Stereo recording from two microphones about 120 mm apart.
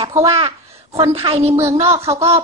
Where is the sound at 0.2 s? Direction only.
50° right (ahead or behind).